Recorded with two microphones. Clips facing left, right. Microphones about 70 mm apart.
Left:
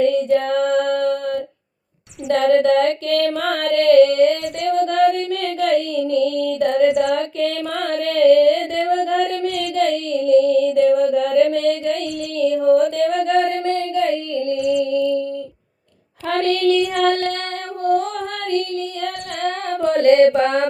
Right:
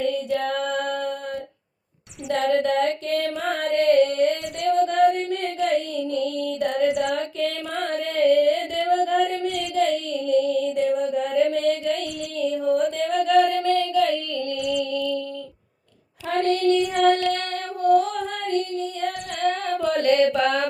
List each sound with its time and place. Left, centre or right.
0.0 s female singing: left
2.5 s female singing: left
3.2 s music: left
12.4 s a sound: left
14.5 s music: left
16.3 s child singing: left
17.8 s music: left